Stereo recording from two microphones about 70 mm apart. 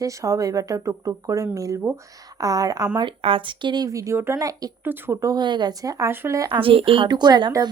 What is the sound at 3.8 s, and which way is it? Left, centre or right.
Speech, right.